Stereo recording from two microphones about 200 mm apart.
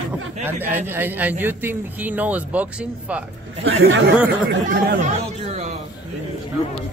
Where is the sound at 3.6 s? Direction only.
80° right.